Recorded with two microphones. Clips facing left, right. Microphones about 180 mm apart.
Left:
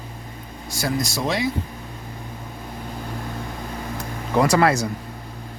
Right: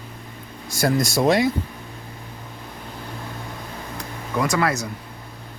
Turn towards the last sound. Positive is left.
turn(degrees=30)  # may be behind; listen again after turning